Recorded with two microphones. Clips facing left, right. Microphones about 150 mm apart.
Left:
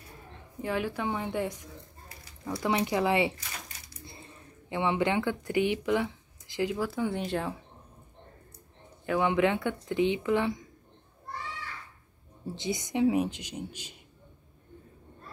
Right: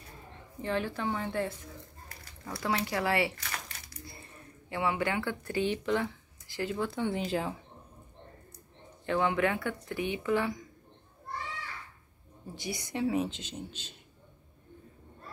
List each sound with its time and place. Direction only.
0.6 s a woman's voice: 10° left (ahead or behind)
6.8 s speech: 5° left (ahead or behind)
9.0 s speech: 15° left (ahead or behind)
12.5 s a woman's voice: 20° left (ahead or behind)